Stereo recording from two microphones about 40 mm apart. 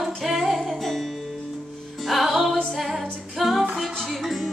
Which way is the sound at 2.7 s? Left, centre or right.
Centre.